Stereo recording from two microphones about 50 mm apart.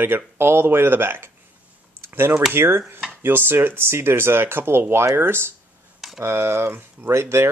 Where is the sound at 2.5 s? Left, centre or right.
Right.